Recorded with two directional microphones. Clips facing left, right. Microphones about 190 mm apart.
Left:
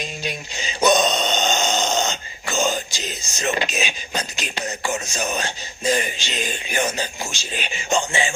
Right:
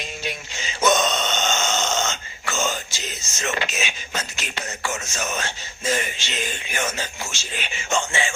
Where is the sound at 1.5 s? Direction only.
35° left (ahead or behind).